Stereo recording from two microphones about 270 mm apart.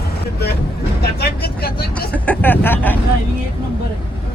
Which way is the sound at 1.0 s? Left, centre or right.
Left.